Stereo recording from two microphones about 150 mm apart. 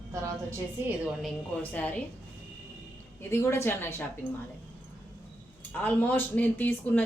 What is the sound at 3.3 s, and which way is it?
Speech, 15° left (ahead or behind).